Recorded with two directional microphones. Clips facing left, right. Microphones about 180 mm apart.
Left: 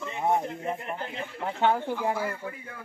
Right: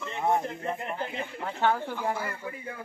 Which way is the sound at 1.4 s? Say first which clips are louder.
Left 2 dB; 20° left (ahead or behind).